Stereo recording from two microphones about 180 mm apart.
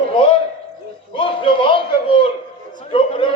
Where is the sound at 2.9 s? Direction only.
30° left (ahead or behind).